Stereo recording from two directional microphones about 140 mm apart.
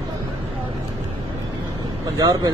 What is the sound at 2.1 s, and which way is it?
Speech, 25° right (ahead or behind).